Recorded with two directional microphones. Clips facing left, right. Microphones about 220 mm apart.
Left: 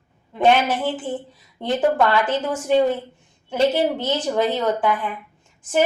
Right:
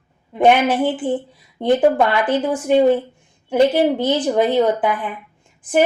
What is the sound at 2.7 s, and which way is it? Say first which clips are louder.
A woman's voice: right 4 dB; 15° right (ahead or behind).